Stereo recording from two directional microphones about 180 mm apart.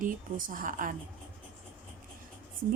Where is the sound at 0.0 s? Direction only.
50° right (ahead or behind).